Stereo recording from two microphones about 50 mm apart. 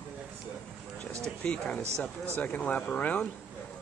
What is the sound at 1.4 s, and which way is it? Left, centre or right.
Speech, centre.